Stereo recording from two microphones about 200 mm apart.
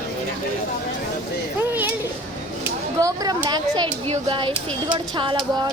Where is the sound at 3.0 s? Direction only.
20° right (ahead or behind).